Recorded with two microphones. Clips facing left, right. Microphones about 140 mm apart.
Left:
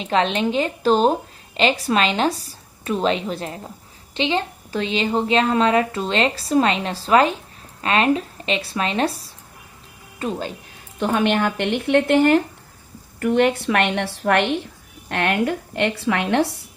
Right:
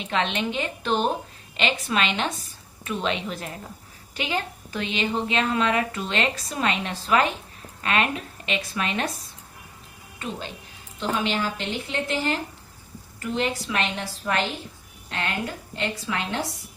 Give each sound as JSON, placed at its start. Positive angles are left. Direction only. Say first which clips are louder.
{"t": 0.0, "sound": "a woman's voice", "louder": "left 6 dB", "side_deg": 35}
{"t": 11.0, "sound": "a woman's voice", "louder": "left 7 dB", "side_deg": 55}